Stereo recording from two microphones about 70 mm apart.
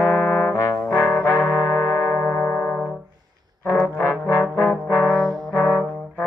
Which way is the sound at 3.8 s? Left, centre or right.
Left.